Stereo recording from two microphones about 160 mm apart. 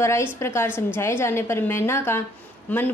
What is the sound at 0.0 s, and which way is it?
Speech, 15° left (ahead or behind).